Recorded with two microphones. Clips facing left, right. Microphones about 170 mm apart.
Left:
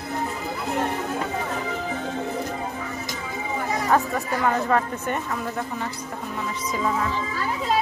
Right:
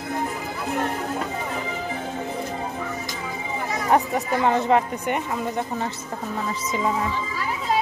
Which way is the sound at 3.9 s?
20° right (ahead or behind).